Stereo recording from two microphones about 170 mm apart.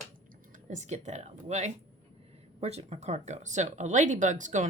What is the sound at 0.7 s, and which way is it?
Speech, 45° right (ahead or behind).